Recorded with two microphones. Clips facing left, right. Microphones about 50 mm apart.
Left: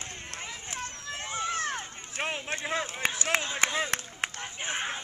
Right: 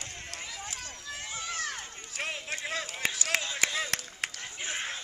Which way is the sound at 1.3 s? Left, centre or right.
Left.